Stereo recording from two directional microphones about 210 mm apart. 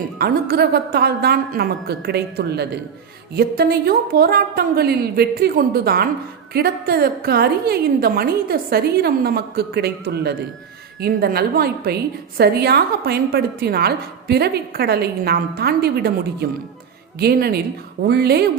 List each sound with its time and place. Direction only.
0.2 s a woman's voice: 45° right (ahead or behind)